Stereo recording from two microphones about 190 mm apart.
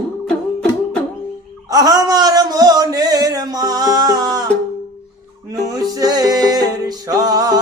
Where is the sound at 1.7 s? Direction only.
20° right (ahead or behind).